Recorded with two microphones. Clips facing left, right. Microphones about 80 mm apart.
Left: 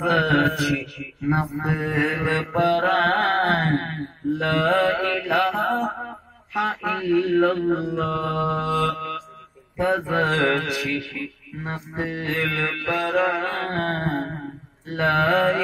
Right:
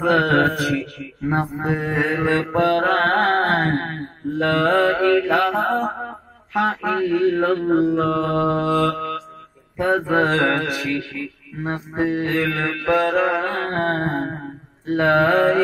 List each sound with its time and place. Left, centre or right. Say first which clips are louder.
0.0 s mantra: right 3 dB; right
4.7 s mantra: right 5 dB; right
14.9 s mantra: right 4 dB; right